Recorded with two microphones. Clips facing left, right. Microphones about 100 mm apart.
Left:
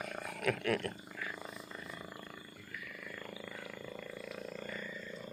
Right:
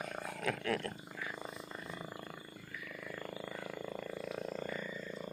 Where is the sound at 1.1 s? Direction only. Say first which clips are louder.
Even; 15° right (ahead or behind).